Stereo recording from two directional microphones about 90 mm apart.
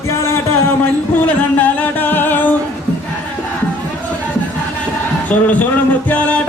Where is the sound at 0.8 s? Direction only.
20° left (ahead or behind).